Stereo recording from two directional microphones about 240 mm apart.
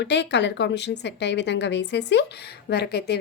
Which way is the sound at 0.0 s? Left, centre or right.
Left.